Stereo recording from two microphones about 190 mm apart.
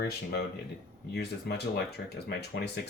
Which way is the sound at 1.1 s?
60° left (ahead or behind).